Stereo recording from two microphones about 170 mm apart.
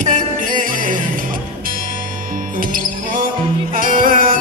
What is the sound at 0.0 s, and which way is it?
Music, 50° right (ahead or behind).